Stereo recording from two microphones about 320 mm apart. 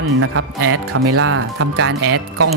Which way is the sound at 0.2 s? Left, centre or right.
Right.